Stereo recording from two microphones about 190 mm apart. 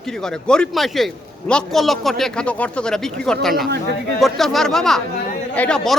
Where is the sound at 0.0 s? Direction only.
5° left (ahead or behind).